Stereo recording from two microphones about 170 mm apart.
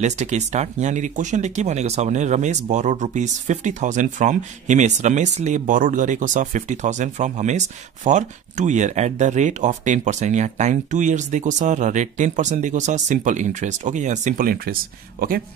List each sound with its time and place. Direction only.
0.0 s speech: 45° right (ahead or behind); by 15.4 s 60° right (ahead or behind)